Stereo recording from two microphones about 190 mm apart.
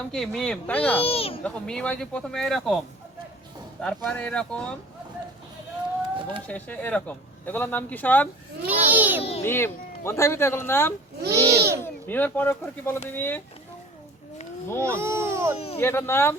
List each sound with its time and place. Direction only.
0.1 s speech: centre (ahead or behind)
1.0 s speech: 30° left (ahead or behind)
1.5 s speech: 5° left (ahead or behind)
3.8 s speech: 5° left (ahead or behind)
6.5 s speech: 10° left (ahead or behind)
8.6 s a child's voice: 10° right (ahead or behind)
9.4 s speech: 10° left (ahead or behind)
11.2 s babbling: 60° right (ahead or behind)
11.8 s speech: 10° left (ahead or behind)
14.8 s speech: 15° right (ahead or behind)
15.5 s speech: 30° left (ahead or behind)
15.8 s speech: 15° left (ahead or behind)